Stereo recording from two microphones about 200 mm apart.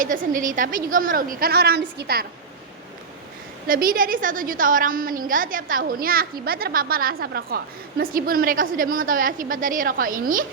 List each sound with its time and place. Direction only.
0.0 s a woman's voice: 40° right (ahead or behind)
3.7 s a woman's voice: 45° right (ahead or behind)